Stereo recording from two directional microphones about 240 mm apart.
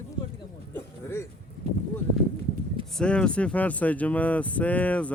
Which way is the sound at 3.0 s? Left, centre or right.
Centre.